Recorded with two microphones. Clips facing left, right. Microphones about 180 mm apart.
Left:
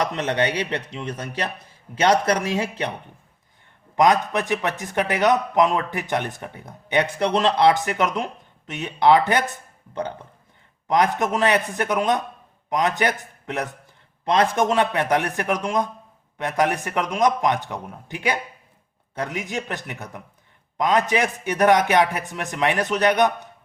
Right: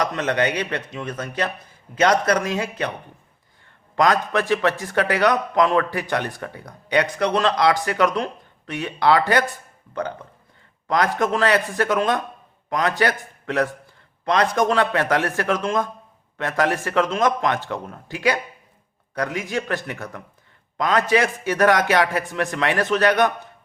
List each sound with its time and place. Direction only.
0.0 s a man's voice: 30° left (ahead or behind)
3.9 s a man's voice: 20° left (ahead or behind)